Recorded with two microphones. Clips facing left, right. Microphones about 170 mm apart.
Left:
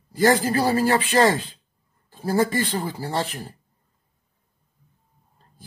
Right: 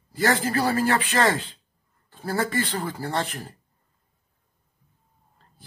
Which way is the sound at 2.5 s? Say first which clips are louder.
Left 2 dB; 30° left (ahead or behind).